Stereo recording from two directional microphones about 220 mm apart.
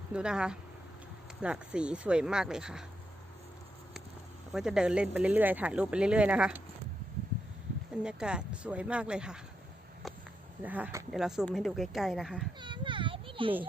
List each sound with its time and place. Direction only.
0.1 s speech: 5° right (ahead or behind)
4.5 s speech: 5° right (ahead or behind)
8.0 s speech: 5° right (ahead or behind)
10.6 s speech: 5° right (ahead or behind)
12.5 s children playing: 20° right (ahead or behind)